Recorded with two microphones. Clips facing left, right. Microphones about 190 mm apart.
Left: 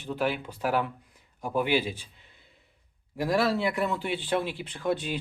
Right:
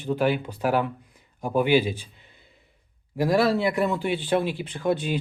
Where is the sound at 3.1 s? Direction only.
5° right (ahead or behind).